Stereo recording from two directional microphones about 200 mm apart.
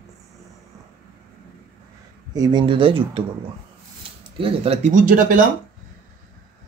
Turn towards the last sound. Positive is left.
turn(degrees=-40)  # may be behind; listen again after turning